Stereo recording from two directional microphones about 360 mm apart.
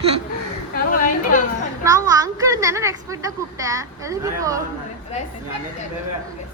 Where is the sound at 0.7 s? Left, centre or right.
Left.